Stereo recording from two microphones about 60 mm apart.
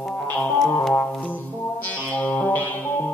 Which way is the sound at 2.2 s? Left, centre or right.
Left.